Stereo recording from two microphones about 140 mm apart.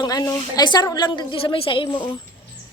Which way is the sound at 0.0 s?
25° left (ahead or behind).